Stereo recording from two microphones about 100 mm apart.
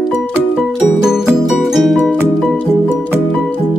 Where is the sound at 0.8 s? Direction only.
5° right (ahead or behind).